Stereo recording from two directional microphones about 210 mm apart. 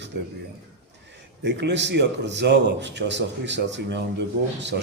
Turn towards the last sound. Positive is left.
turn(degrees=-55)  # may be behind; listen again after turning